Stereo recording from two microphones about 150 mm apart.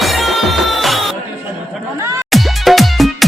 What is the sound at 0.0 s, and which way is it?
Music, centre (ahead or behind).